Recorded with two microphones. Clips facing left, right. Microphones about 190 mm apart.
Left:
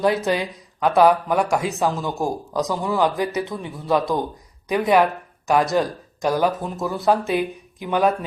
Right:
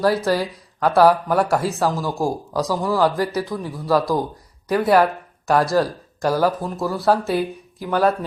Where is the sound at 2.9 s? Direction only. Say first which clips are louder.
Right 1 dB; 20° left (ahead or behind).